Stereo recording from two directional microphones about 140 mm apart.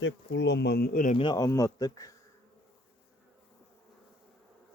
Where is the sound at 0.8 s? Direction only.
80° left.